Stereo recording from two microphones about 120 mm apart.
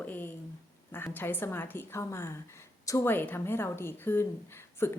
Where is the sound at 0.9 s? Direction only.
20° left (ahead or behind).